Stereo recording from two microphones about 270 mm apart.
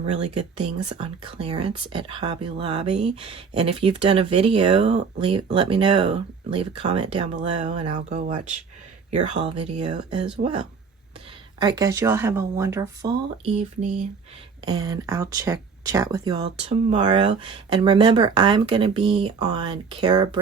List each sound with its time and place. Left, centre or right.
0.0 s speech: right
14.6 s speech: centre